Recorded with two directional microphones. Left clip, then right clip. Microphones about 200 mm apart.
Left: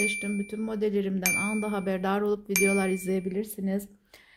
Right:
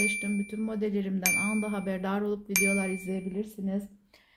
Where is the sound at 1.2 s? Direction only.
Centre (ahead or behind).